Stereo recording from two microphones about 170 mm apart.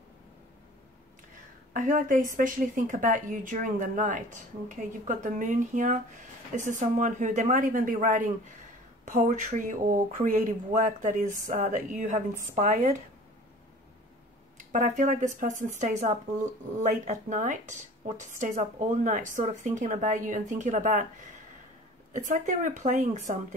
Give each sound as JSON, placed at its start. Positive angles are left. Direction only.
{"t": 1.7, "sound": "a woman's voice", "side_deg": -50}
{"t": 14.6, "sound": "a woman's voice", "side_deg": -45}
{"t": 22.1, "sound": "a woman's voice", "side_deg": -45}